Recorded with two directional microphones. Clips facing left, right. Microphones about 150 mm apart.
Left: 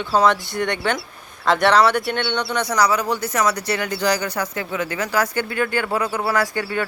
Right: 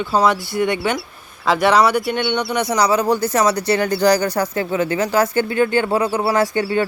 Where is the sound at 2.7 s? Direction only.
25° right (ahead or behind).